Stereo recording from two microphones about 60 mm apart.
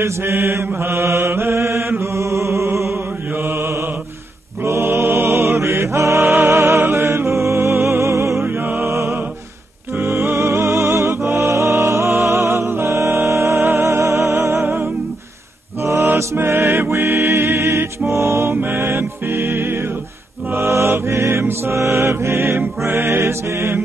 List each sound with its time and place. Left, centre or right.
0.0 s mantra: right
4.6 s music: right
8.5 s music: right
8.8 s music: right
15.8 s mantra: right
16.2 s music: right
18.5 s music: right
20.5 s mantra: right
20.9 s music: right